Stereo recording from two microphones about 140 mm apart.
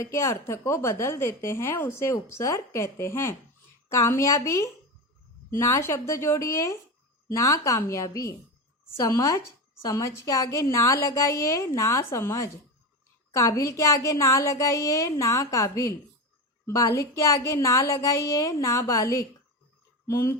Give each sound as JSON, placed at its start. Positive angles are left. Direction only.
{"t": 0.0, "sound": "speech", "side_deg": 20}